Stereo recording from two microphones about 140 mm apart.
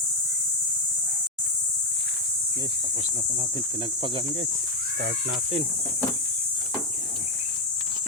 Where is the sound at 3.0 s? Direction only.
55° right (ahead or behind); by 4.4 s 40° right (ahead or behind).